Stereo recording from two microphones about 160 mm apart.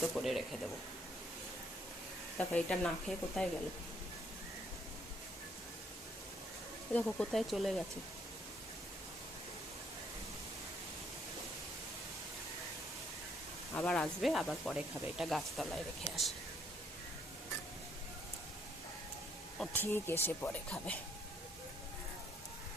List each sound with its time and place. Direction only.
0.0 s speech: centre (ahead or behind)
2.4 s speech: 5° left (ahead or behind)
6.9 s speech: 10° left (ahead or behind)
13.7 s speech: 5° left (ahead or behind)
19.5 s speech: 15° left (ahead or behind)